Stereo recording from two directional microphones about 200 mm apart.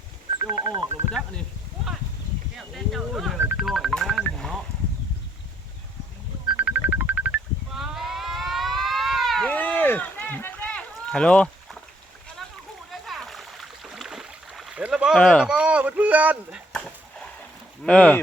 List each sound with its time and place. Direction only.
0.3 s telephone dialing: 15° right (ahead or behind)
2.6 s speech: centre (ahead or behind)
3.6 s telephone dialing: centre (ahead or behind)
6.7 s a sound: 10° right (ahead or behind)
17.8 s speech: 5° left (ahead or behind)